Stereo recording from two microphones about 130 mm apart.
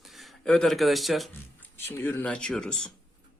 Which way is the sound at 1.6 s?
15° left (ahead or behind).